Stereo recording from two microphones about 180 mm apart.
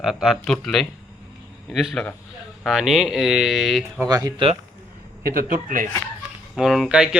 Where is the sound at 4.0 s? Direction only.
20° right (ahead or behind).